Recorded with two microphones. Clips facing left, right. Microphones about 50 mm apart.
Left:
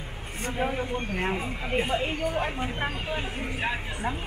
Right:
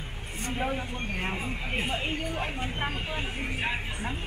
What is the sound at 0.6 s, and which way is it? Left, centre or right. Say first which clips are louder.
Speech: left 4 dB; centre.